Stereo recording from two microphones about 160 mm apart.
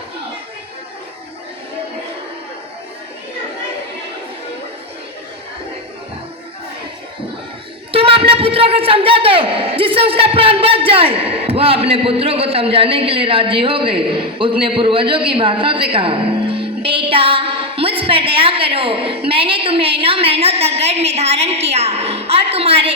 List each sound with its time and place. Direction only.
7.9 s a man's voice: 35° right (ahead or behind)